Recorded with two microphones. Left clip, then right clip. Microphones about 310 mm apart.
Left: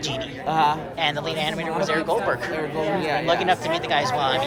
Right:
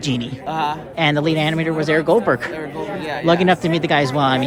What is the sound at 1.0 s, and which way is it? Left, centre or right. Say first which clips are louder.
A man's voice: right 6 dB; right.